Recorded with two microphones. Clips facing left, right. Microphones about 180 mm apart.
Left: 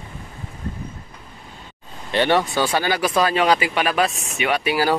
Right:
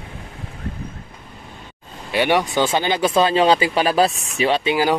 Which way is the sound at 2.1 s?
15° right (ahead or behind).